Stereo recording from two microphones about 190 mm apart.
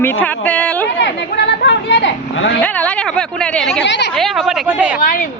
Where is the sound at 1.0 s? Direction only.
65° left (ahead or behind).